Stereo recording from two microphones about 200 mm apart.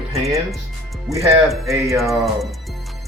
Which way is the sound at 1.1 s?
15° right (ahead or behind).